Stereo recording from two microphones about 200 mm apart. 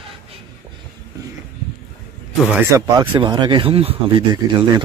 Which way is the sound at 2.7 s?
15° right (ahead or behind).